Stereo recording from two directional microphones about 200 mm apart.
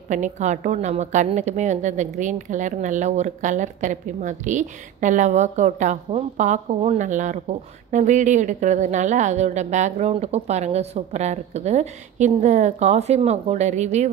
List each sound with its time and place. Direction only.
0.1 s a woman's voice: 35° right (ahead or behind)